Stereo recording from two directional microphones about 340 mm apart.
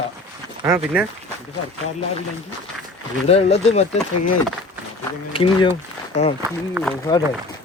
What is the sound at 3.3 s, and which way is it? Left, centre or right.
Speech, centre.